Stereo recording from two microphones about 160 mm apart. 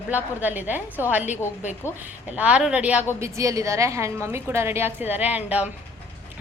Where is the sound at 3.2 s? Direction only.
20° right (ahead or behind).